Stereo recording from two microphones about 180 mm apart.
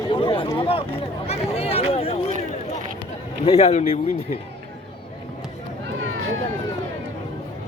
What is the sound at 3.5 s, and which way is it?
Speech, 35° left (ahead or behind).